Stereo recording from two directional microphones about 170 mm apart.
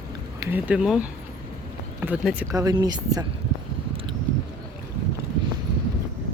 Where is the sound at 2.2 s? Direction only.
10° right (ahead or behind).